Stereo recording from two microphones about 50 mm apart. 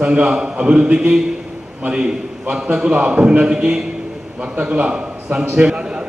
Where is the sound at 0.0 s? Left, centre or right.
Right.